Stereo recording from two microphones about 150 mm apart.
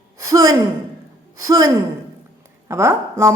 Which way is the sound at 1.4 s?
25° right (ahead or behind).